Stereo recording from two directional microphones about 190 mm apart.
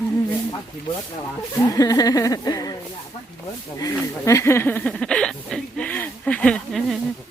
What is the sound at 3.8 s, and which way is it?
Speech, 20° left (ahead or behind).